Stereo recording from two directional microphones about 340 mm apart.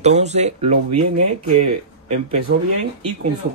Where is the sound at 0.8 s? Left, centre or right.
Right.